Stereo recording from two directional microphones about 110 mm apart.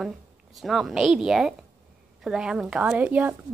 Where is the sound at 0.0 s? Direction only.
Centre (ahead or behind).